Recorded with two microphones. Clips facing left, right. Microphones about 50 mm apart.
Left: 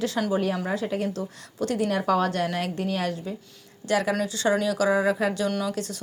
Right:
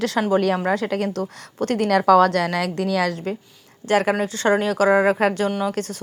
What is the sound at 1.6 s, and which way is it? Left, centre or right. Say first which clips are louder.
A woman's voice: right 6 dB; right.